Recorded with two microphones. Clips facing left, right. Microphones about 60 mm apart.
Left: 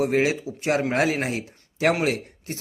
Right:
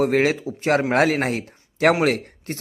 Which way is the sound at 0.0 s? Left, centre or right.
Right.